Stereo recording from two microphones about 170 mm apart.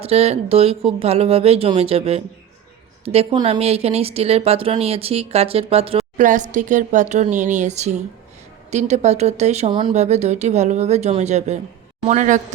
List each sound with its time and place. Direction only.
0.0 s speech: 35° right (ahead or behind)
6.1 s speech: 50° right (ahead or behind)